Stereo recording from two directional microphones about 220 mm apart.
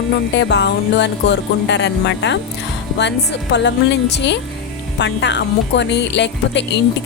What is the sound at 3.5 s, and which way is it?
Music, 50° left (ahead or behind).